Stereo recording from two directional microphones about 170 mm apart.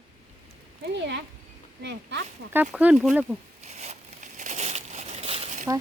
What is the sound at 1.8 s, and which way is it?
Speech, 90° right.